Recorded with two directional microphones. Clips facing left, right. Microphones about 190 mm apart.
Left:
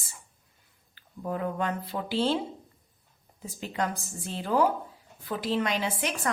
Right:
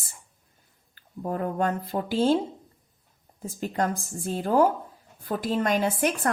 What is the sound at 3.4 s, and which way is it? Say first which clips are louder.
A woman's voice: right 4 dB; 45° right (ahead or behind).